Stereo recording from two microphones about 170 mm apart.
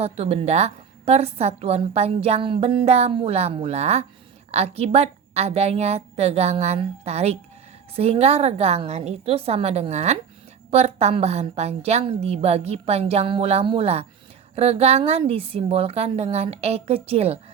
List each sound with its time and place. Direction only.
0.0 s a woman's voice: 35° right (ahead or behind)